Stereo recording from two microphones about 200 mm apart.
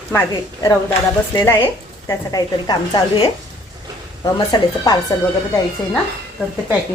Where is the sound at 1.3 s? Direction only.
15° left (ahead or behind).